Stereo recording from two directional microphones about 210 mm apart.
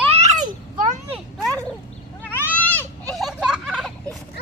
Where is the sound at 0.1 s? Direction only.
30° right (ahead or behind).